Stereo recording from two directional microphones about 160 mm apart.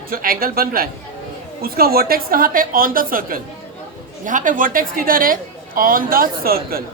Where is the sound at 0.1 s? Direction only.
60° right (ahead or behind).